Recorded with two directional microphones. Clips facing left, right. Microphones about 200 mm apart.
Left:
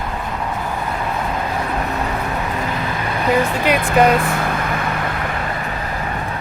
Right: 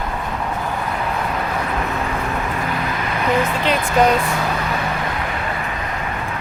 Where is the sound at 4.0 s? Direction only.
10° left (ahead or behind).